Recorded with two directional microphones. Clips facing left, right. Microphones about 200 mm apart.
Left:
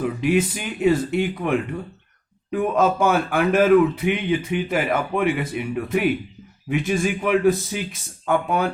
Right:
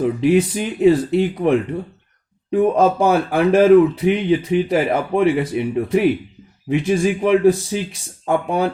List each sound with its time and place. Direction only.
0.0 s speech: 30° right (ahead or behind)